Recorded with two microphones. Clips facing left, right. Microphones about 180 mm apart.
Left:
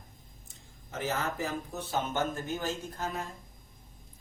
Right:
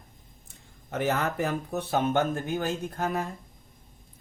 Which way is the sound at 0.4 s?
60° right (ahead or behind).